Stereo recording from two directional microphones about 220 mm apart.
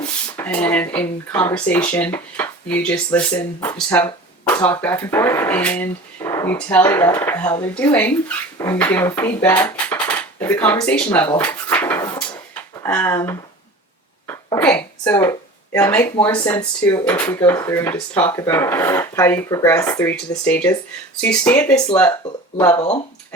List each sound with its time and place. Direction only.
0.0 s speech: 5° left (ahead or behind)
11.3 s dishes: 10° left (ahead or behind)
12.8 s speech: 10° left (ahead or behind)
14.3 s a sound: 10° left (ahead or behind)
15.1 s speech: 15° left (ahead or behind)
22.8 s speech: 30° left (ahead or behind)